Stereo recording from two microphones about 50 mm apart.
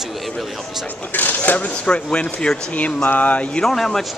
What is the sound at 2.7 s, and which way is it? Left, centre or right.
Speech, left.